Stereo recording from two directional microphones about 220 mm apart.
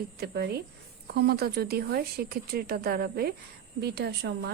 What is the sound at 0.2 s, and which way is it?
A woman's voice, 45° right (ahead or behind).